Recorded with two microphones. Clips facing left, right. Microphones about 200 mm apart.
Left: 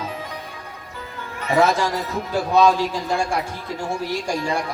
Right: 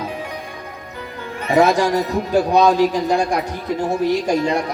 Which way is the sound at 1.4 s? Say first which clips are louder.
Right 4 dB; 15° right (ahead or behind).